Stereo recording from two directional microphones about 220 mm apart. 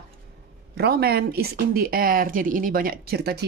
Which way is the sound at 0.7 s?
45° right (ahead or behind).